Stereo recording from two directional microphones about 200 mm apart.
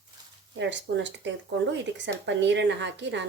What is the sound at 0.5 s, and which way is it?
Speech, 65° right (ahead or behind).